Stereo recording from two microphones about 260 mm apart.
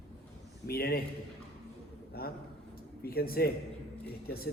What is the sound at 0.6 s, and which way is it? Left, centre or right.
Speech, left.